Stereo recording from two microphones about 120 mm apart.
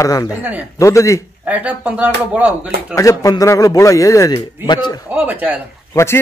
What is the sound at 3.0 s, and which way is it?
Speech, 25° left (ahead or behind).